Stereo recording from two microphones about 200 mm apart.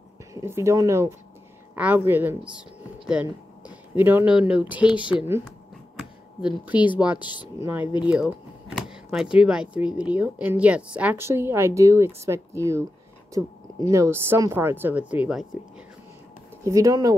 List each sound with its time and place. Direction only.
0.3 s speech: 15° right (ahead or behind)
3.9 s speech: 10° right (ahead or behind)
6.7 s speech: 20° left (ahead or behind)
7.6 s speech: 10° right (ahead or behind)
16.6 s speech: 15° right (ahead or behind)